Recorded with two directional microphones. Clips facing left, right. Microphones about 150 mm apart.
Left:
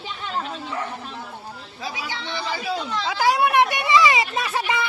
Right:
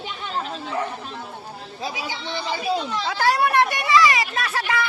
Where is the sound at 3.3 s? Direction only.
15° left (ahead or behind).